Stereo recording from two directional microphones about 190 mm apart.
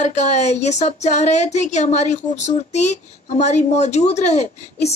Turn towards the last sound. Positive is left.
turn(degrees=35)  # may be behind; listen again after turning